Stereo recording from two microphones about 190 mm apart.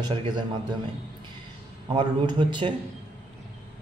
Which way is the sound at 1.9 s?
25° right (ahead or behind).